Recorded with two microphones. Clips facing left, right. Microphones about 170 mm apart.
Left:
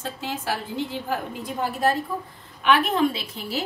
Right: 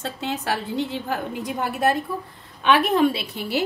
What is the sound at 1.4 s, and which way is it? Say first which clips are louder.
A woman's voice: right 1 dB; 70° right (ahead or behind).